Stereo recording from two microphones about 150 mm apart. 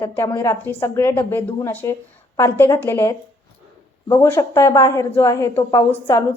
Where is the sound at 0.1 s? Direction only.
20° left (ahead or behind).